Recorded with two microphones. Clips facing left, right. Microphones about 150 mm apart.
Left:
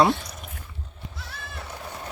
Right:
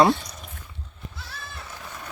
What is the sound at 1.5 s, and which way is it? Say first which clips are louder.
Sheep: left 6 dB; 25° left (ahead or behind).